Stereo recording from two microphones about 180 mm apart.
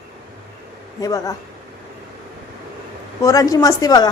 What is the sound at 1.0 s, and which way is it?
Speech, 20° left (ahead or behind).